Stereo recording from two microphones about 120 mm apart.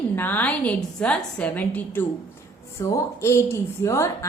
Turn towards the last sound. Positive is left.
turn(degrees=20)  # may be behind; listen again after turning